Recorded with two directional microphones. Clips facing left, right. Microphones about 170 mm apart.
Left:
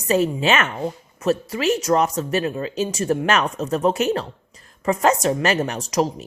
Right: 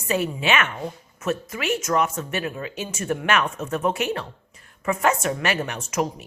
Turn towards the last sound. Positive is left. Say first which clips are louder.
# left 4 dB
turn(degrees=35)  # may be behind; listen again after turning